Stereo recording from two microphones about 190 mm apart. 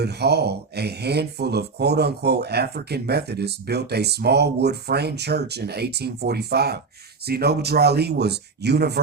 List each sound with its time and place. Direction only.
0.0 s speech: 60° right (ahead or behind)